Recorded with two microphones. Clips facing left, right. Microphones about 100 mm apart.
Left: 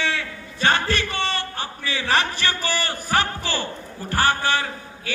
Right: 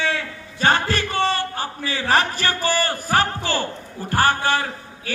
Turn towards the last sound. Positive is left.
turn(degrees=-40)  # may be behind; listen again after turning